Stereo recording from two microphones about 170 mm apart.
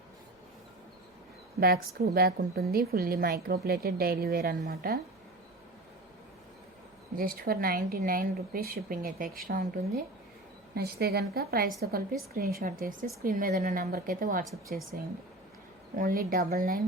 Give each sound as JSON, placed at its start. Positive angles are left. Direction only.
{"t": 1.5, "sound": "a woman's voice", "side_deg": -65}
{"t": 7.2, "sound": "a woman's voice", "side_deg": -60}